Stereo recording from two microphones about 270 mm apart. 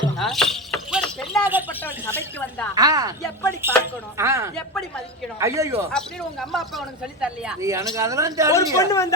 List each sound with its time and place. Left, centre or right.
0.2 s shatter: centre
1.8 s speech: centre
2.7 s speech: centre
4.5 s speech: centre
5.4 s speech: centre
5.9 s speech: centre
8.7 s speech: centre